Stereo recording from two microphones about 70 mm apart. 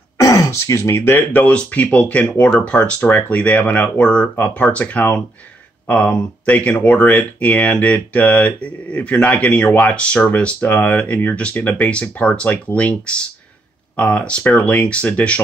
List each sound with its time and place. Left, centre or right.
0.2 s speech: left